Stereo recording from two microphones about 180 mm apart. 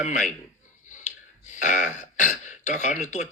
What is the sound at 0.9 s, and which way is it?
Clicking, 45° left (ahead or behind).